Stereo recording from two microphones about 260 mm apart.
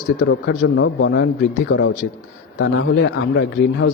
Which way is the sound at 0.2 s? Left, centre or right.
Left.